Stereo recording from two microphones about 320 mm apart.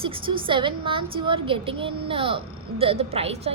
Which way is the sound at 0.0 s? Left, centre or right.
Centre.